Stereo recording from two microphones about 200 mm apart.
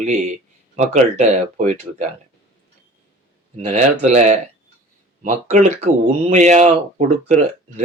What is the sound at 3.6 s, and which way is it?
Speech, 35° right (ahead or behind).